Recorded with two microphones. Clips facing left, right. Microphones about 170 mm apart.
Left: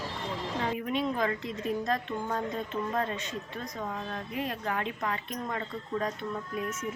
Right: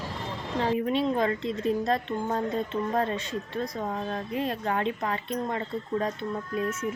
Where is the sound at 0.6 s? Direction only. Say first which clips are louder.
Right 6 dB; 30° right (ahead or behind).